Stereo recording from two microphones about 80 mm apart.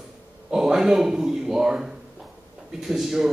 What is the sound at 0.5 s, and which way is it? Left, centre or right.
A man's voice, centre.